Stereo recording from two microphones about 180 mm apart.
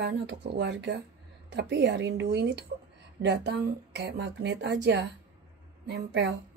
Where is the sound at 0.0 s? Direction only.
70° right (ahead or behind).